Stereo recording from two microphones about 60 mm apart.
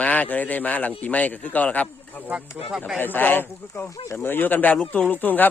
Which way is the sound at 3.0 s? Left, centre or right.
Left.